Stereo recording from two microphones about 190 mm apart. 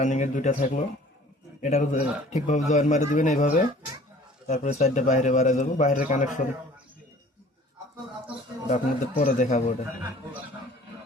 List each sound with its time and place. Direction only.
0.0 s a man's voice: 40° left (ahead or behind)
8.7 s a man's voice: 35° left (ahead or behind)